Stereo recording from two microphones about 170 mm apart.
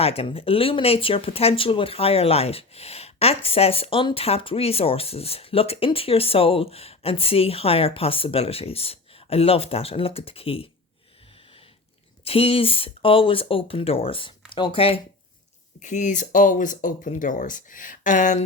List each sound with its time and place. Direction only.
0.0 s speech: 35° left (ahead or behind)
12.2 s speech: 35° left (ahead or behind)
15.8 s speech: 45° left (ahead or behind)